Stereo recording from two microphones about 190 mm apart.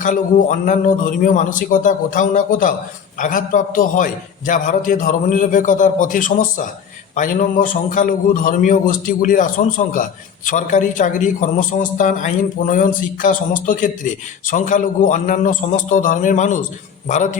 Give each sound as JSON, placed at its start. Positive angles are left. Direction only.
{"t": 0.0, "sound": "a man's voice", "side_deg": 40}